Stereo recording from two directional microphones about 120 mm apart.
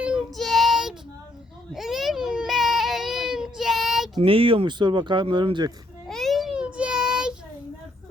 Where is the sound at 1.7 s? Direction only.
Centre (ahead or behind).